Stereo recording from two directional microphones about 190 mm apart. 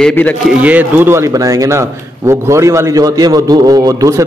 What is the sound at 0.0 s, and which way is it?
Speech, 10° left (ahead or behind).